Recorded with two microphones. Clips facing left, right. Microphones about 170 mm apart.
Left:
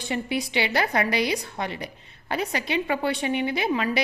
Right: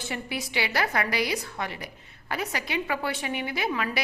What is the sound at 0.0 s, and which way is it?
A woman's voice, 20° left (ahead or behind).